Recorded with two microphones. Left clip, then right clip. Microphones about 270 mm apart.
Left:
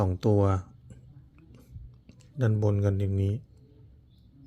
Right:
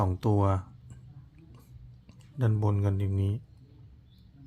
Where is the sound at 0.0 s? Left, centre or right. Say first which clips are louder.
Left 3 dB; centre.